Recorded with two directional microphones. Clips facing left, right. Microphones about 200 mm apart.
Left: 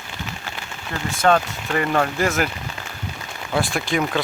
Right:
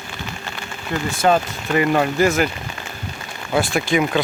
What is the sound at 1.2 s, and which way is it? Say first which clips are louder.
Speech: even; 5° right (ahead or behind).